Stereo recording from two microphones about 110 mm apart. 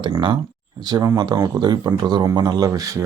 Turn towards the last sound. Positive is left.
turn(degrees=-35)  # may be behind; listen again after turning